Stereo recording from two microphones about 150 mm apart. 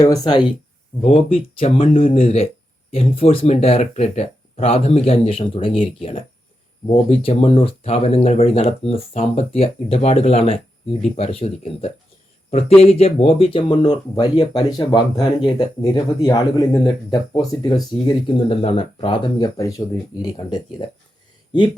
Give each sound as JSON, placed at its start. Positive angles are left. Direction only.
{"t": 0.0, "sound": "speech", "side_deg": 30}